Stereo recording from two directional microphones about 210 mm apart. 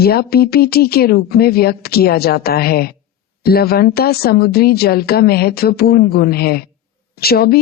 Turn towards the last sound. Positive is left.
turn(degrees=45)  # may be behind; listen again after turning